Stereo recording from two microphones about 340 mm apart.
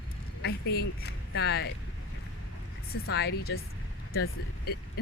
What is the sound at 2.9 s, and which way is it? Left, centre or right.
Speech, left.